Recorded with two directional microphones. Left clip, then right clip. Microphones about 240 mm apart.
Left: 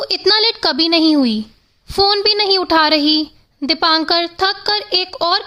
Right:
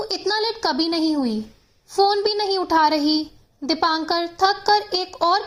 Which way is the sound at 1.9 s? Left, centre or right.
Left.